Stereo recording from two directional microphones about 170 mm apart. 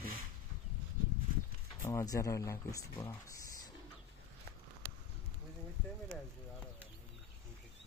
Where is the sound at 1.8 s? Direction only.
20° left (ahead or behind).